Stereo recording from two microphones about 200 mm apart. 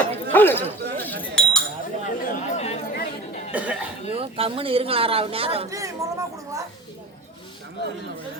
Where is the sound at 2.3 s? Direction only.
35° left (ahead or behind).